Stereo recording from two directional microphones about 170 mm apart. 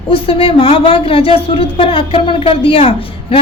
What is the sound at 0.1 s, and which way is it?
A woman's voice, 35° left (ahead or behind).